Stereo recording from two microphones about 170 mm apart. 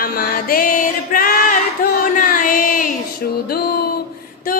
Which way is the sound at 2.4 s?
55° left (ahead or behind).